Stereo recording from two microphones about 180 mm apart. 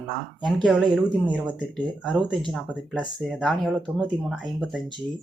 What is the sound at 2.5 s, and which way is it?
Speech, centre (ahead or behind).